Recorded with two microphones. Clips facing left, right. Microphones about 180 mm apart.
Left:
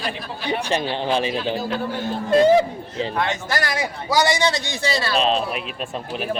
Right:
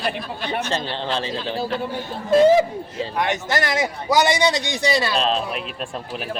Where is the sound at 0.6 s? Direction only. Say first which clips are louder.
Left 3 dB; 15° left (ahead or behind).